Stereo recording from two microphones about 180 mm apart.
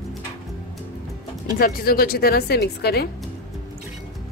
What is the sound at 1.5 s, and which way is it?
Speech, 55° left (ahead or behind).